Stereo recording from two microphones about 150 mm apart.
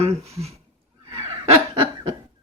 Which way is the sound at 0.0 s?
45° right (ahead or behind).